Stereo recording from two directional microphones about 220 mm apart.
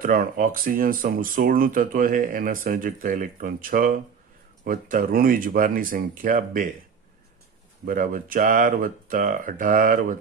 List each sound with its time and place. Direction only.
0.0 s speech: 40° right (ahead or behind)
7.8 s speech: 40° right (ahead or behind)